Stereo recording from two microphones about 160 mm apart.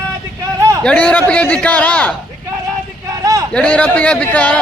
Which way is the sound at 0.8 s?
5° left (ahead or behind).